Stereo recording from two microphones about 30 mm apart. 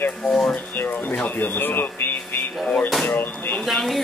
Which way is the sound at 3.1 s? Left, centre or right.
Left.